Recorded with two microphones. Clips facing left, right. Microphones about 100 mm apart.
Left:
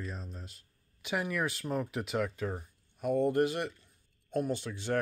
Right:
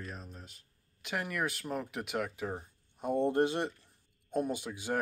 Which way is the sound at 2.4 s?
20° right (ahead or behind).